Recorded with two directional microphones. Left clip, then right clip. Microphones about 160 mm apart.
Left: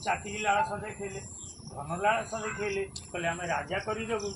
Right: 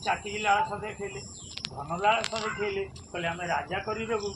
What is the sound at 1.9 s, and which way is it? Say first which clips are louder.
Speech: right 2 dB; 30° left (ahead or behind).